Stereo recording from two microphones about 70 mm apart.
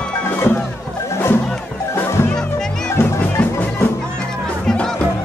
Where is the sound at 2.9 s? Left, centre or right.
Left.